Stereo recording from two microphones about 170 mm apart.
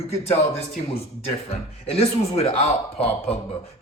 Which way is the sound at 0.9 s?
35° left (ahead or behind).